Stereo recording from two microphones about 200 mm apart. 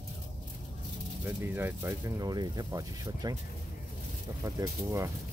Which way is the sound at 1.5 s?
10° right (ahead or behind).